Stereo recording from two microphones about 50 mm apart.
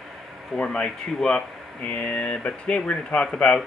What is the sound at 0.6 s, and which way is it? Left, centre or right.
Speech, centre.